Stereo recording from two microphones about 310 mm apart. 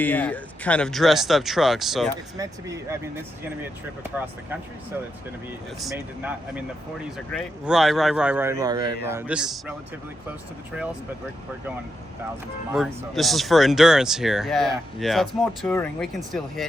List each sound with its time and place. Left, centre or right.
0.0 s a man's voice: centre
4.1 s speech: centre
5.8 s a man's voice: centre
12.7 s a man's voice: centre